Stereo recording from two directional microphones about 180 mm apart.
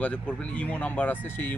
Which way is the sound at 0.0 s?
5° left (ahead or behind).